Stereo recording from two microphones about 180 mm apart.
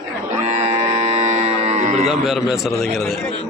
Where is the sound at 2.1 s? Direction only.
Centre (ahead or behind).